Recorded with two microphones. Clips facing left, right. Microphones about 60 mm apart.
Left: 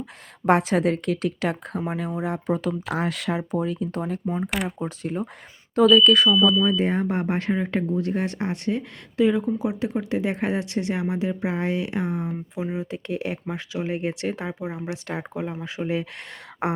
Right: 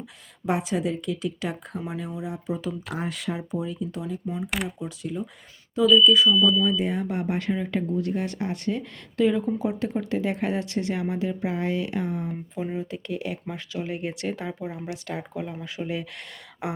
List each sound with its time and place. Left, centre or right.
0.0 s a woman's voice: left
1.9 s a woman's voice: left
2.9 s a woman's voice: left
4.4 s speech: centre
4.8 s speech: left
5.7 s a woman's voice: left
6.7 s speech: left
9.1 s speech: centre; by 16.7 s left